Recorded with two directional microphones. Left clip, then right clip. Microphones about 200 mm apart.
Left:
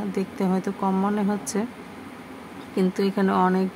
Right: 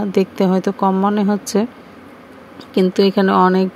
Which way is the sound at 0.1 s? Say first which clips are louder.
Right 11 dB; 30° right (ahead or behind).